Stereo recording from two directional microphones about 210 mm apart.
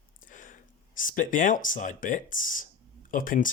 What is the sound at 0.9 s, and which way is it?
Speech, 40° left (ahead or behind).